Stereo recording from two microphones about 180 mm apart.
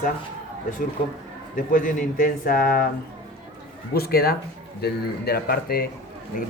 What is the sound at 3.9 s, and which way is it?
Speech, 60° left (ahead or behind).